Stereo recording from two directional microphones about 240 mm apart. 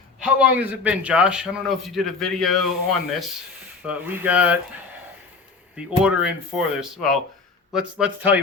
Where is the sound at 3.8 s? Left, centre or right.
Centre.